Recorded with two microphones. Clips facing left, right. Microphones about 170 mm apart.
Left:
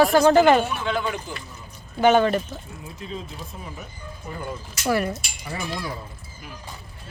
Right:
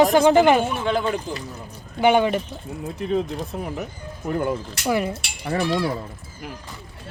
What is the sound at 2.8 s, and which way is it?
Speech, 70° right (ahead or behind).